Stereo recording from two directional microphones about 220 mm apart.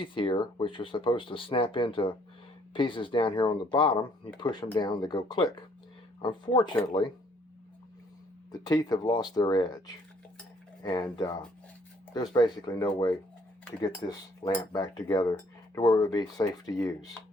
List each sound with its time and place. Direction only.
0.0 s speech: 20° left (ahead or behind)
8.6 s speech: 20° left (ahead or behind)
12.1 s cutlery: 20° left (ahead or behind)